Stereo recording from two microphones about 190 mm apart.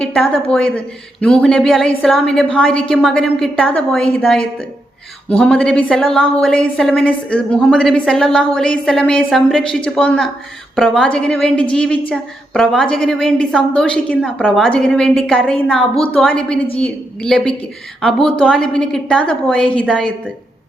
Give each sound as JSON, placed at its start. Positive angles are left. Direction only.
{"t": 0.0, "sound": "a woman's voice", "side_deg": 5}